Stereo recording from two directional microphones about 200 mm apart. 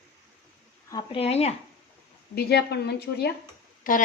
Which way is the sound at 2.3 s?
55° left (ahead or behind).